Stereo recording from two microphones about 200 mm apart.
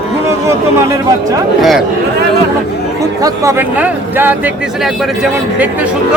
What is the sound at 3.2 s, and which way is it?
Speech, 15° right (ahead or behind).